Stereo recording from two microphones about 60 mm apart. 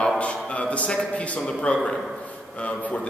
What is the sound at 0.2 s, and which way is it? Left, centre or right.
A man's voice, left.